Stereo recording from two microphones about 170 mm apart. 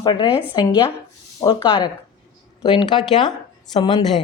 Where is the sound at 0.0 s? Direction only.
25° left (ahead or behind).